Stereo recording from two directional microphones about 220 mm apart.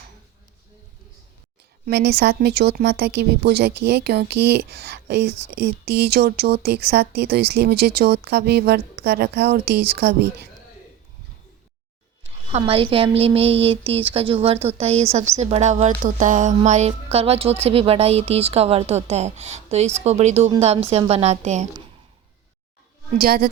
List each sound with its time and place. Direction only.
1.9 s speech: 45° right (ahead or behind)
12.5 s speech: 25° right (ahead or behind)
23.1 s speech: 40° right (ahead or behind)